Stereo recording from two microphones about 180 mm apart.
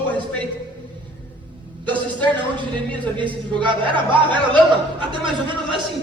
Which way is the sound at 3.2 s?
25° right (ahead or behind).